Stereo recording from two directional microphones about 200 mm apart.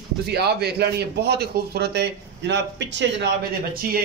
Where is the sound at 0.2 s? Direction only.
55° right (ahead or behind).